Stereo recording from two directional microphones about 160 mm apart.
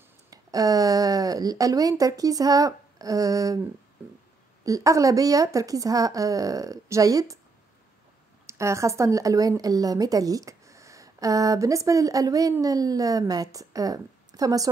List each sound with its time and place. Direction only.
0.3 s speech: 20° right (ahead or behind)
4.6 s a woman's voice: 20° right (ahead or behind)
8.5 s a woman's voice: 20° right (ahead or behind)